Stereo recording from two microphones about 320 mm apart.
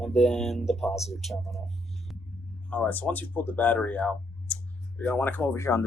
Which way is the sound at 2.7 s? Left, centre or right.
Centre.